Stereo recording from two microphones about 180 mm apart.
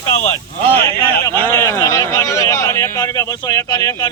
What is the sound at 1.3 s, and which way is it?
A man's voice, 15° left (ahead or behind).